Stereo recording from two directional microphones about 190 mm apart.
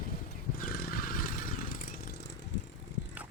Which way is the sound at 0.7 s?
50° left (ahead or behind).